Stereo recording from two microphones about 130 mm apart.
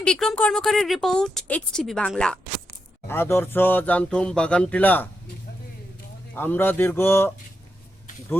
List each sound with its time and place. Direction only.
0.0 s speech: 5° left (ahead or behind)
3.1 s speech: 20° left (ahead or behind)
6.3 s speech: 15° left (ahead or behind)